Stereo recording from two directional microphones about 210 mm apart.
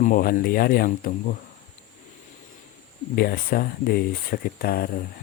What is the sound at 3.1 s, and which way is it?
Speech, 45° left (ahead or behind).